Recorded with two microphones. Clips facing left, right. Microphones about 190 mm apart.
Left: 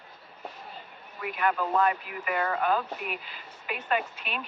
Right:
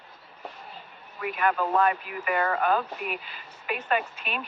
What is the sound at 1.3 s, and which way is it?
Speech, 55° right (ahead or behind).